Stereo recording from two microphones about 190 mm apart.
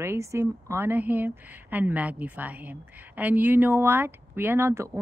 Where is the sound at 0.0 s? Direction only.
15° right (ahead or behind).